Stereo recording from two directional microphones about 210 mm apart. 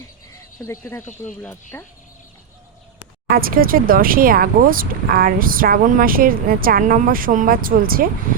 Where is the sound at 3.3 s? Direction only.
45° right (ahead or behind).